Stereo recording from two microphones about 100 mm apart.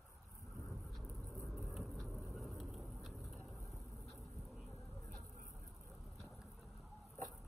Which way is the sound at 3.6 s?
30° left (ahead or behind).